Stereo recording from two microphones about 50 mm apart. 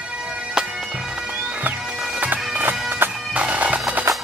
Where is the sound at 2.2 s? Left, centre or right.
Right.